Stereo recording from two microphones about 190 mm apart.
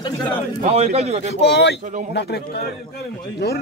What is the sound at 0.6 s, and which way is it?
Speech, 35° right (ahead or behind).